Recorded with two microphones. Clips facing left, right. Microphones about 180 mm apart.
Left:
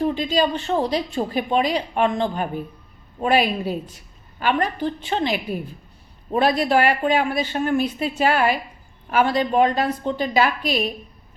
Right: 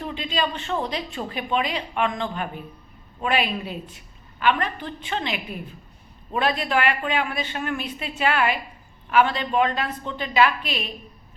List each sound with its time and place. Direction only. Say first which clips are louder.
0.0 s a woman's voice: left 7 dB; 40° left (ahead or behind)